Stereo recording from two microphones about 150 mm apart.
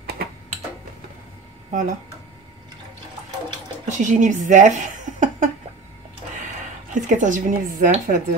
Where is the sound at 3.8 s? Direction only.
55° right (ahead or behind).